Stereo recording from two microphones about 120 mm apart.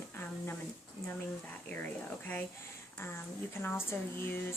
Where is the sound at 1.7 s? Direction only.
15° left (ahead or behind).